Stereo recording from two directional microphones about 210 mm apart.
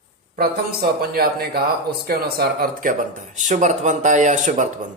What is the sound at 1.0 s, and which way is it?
Speech, 45° right (ahead or behind).